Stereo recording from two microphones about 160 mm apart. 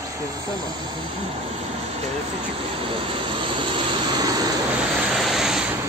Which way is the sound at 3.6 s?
30° right (ahead or behind).